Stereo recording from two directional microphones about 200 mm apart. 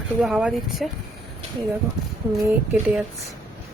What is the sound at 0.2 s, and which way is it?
Speech, 5° right (ahead or behind).